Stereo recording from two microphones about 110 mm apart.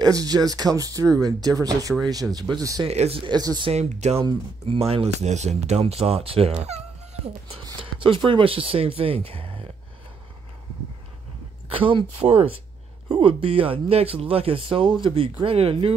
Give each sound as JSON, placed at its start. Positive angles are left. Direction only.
{"t": 0.0, "sound": "speech", "side_deg": -35}
{"t": 2.9, "sound": "speech", "side_deg": -70}
{"t": 3.3, "sound": "speech", "side_deg": -40}
{"t": 3.7, "sound": "speech", "side_deg": -75}
{"t": 4.3, "sound": "speech", "side_deg": -55}
{"t": 7.8, "sound": "speech", "side_deg": -50}
{"t": 11.7, "sound": "speech", "side_deg": -50}